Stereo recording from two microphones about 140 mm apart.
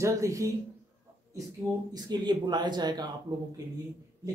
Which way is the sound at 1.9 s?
30° right (ahead or behind).